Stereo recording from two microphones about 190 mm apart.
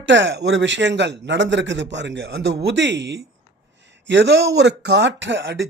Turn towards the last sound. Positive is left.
turn(degrees=-70)  # may be behind; listen again after turning